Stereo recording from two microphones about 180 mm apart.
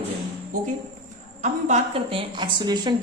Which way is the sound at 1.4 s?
35° right (ahead or behind).